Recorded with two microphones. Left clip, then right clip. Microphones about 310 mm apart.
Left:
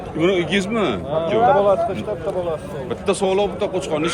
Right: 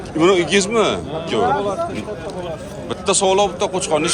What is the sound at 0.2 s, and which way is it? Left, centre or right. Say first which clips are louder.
Speech: right 4 dB; centre.